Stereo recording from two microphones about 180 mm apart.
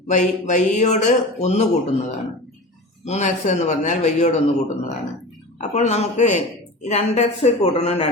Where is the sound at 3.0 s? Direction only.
40° left (ahead or behind).